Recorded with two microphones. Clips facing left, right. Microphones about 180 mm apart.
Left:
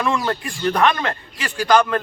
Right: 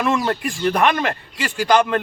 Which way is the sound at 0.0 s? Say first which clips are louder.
Right 2 dB; 15° right (ahead or behind).